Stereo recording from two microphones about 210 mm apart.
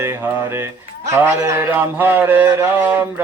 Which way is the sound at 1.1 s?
15° right (ahead or behind).